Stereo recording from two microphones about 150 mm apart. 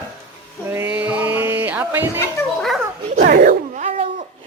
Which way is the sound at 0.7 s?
15° right (ahead or behind).